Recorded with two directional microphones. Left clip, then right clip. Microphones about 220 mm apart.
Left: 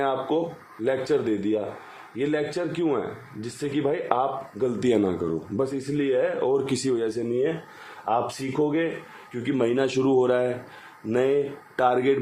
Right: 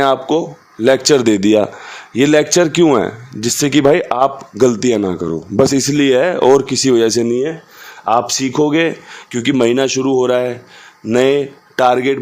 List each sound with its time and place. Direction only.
0.0 s a man's voice: 50° right (ahead or behind)
4.8 s speech: 30° right (ahead or behind)
5.7 s speech: 50° right (ahead or behind)
6.7 s speech: 30° right (ahead or behind)
6.9 s a man's voice: 45° right (ahead or behind); by 10.5 s 30° right (ahead or behind)
11.1 s speech: 40° right (ahead or behind)